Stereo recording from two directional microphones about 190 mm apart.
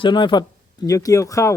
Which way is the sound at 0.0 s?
25° left (ahead or behind).